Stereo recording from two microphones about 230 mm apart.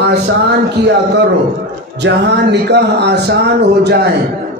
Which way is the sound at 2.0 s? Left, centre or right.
Right.